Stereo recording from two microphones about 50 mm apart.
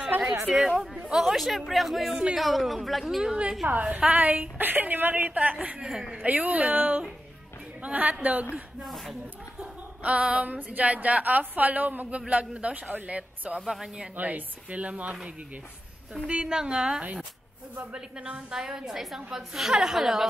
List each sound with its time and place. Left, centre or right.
0.5 s speech: centre
3.3 s speech: centre
3.6 s a woman's voice: right
5.9 s a woman's voice: centre
6.1 s a woman's voice: right
8.8 s speech: centre
9.6 s speech: right
13.7 s speech: centre
14.1 s speech: right
16.3 s a woman's voice: centre